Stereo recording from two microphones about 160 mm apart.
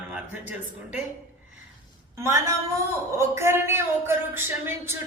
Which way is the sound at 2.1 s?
15° right (ahead or behind).